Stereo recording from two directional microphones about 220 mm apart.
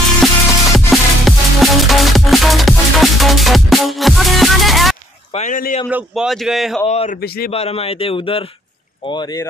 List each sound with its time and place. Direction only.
0.7 s music: centre (ahead or behind)
5.3 s a sound: 35° left (ahead or behind)
5.9 s a man's voice: 5° right (ahead or behind)
6.9 s a man's voice: 30° left (ahead or behind)
7.2 s a man's voice: 45° left (ahead or behind)
7.5 s a man's voice: 30° left (ahead or behind)